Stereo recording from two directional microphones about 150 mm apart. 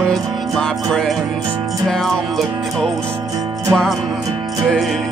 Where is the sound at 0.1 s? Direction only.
5° left (ahead or behind).